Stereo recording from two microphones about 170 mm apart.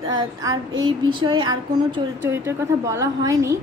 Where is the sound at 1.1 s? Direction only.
25° right (ahead or behind).